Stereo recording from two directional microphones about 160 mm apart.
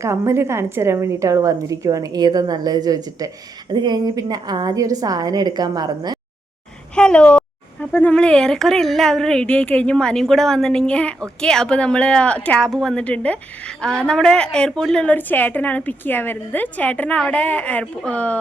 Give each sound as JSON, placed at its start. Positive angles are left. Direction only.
{"t": 0.0, "sound": "a woman's voice", "side_deg": -15}
{"t": 6.9, "sound": "a woman's voice", "side_deg": 5}